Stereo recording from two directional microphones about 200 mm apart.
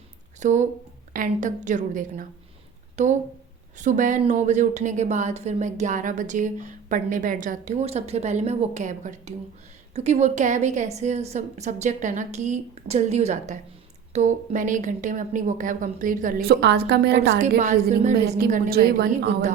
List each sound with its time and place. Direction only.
0.3 s a woman's voice: 35° right (ahead or behind); by 17.2 s 55° right (ahead or behind)
17.6 s a woman's voice: 40° right (ahead or behind)
18.3 s a woman's voice: 50° right (ahead or behind)